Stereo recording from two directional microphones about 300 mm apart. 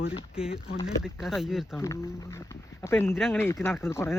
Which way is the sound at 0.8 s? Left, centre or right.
Centre.